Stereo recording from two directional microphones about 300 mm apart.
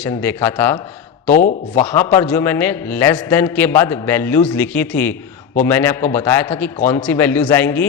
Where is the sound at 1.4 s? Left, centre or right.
Left.